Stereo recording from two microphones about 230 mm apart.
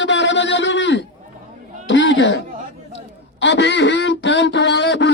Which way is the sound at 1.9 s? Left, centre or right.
Left.